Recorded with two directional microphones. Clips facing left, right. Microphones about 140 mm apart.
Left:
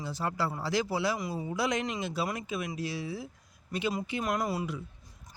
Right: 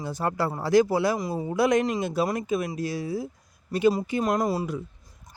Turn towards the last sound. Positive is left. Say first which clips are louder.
# right 6 dB
turn(degrees=-40)  # may be behind; listen again after turning